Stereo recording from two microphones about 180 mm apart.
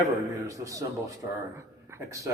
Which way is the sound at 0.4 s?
20° right (ahead or behind).